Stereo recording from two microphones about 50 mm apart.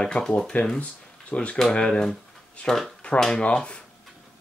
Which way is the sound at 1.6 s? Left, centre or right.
Centre.